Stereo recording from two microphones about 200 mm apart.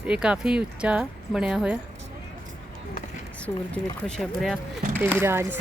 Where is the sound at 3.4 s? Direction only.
5° left (ahead or behind).